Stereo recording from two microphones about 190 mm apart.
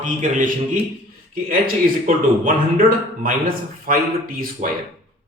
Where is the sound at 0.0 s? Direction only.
45° right (ahead or behind).